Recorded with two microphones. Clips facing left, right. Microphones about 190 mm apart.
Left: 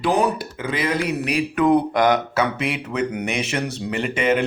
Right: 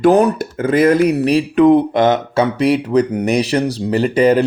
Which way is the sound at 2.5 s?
35° right (ahead or behind).